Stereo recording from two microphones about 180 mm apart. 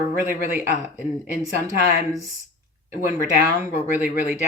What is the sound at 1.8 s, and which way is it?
Speech, 40° left (ahead or behind).